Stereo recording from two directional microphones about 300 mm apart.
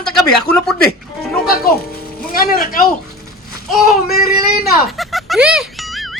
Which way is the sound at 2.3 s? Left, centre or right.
Left.